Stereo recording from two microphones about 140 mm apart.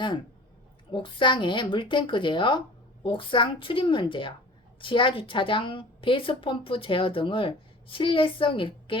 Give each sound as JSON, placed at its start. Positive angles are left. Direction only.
{"t": 0.9, "sound": "a woman's voice", "side_deg": 35}